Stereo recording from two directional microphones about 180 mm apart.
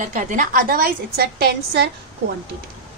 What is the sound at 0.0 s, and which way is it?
A woman's voice, 45° right (ahead or behind).